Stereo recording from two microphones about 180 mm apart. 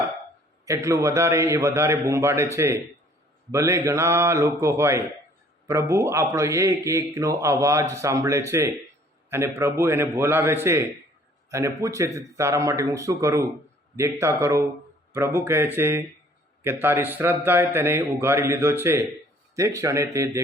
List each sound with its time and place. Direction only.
0.6 s a man's voice: 15° right (ahead or behind)